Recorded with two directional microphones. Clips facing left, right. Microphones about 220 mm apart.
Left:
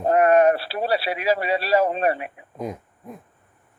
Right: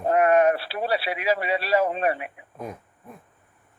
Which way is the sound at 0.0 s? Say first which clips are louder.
Left 3 dB; 35° left (ahead or behind).